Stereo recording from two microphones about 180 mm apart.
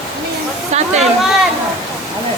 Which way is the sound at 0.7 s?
40° right (ahead or behind).